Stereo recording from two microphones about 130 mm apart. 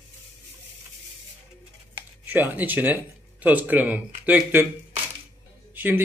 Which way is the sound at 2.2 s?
15° right (ahead or behind).